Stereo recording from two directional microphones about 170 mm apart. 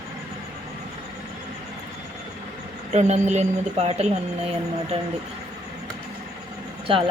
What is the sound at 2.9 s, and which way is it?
Speech, 40° right (ahead or behind).